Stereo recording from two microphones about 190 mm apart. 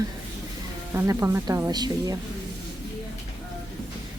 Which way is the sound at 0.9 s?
15° right (ahead or behind).